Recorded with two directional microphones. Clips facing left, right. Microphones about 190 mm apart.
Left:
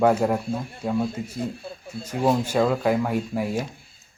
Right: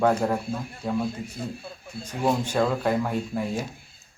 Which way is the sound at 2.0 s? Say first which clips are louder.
Left 3 dB; 10° left (ahead or behind).